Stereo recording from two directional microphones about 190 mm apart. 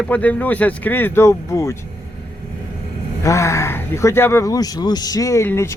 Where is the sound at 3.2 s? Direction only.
15° left (ahead or behind).